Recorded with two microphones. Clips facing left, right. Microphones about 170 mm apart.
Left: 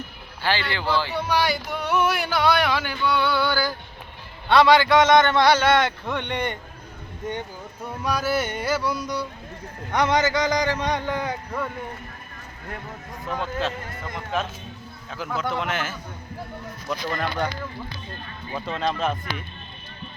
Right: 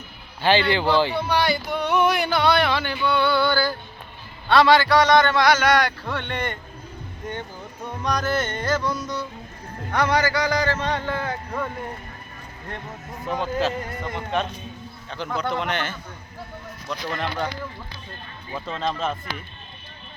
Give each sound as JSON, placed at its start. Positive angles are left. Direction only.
{"t": 0.4, "sound": "speech", "side_deg": -20}
{"t": 1.1, "sound": "a man's voice", "side_deg": 10}
{"t": 8.0, "sound": "speech", "side_deg": 5}
{"t": 13.2, "sound": "a man's voice", "side_deg": 0}
{"t": 18.5, "sound": "a man's voice", "side_deg": 0}